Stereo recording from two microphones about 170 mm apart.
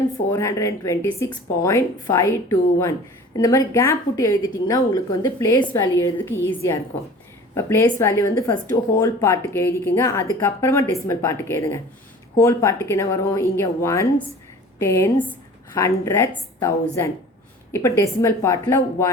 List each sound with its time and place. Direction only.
0.3 s a woman's voice: 20° left (ahead or behind)
7.5 s speech: 15° left (ahead or behind)